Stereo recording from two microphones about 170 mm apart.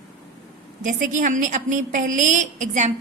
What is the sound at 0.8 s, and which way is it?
A woman's voice, 50° right (ahead or behind).